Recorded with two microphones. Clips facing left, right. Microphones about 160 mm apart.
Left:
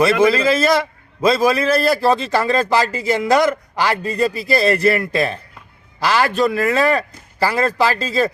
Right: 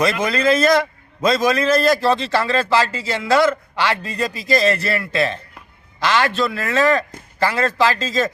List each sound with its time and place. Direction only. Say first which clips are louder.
0.0 s a man's voice: left 4 dB; 5° left (ahead or behind)
3.9 s a man's voice: left 6 dB; 35° left (ahead or behind)
5.1 s a man's voice: left 1 dB; 10° left (ahead or behind)